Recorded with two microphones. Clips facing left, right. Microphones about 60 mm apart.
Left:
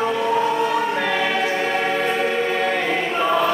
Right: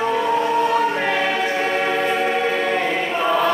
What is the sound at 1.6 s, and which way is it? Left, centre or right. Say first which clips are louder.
Music: right 1 dB; centre.